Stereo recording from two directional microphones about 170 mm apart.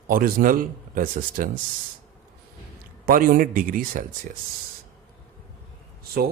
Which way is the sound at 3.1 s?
55° right (ahead or behind).